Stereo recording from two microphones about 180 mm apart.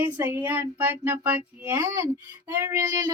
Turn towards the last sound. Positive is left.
turn(degrees=-20)  # may be behind; listen again after turning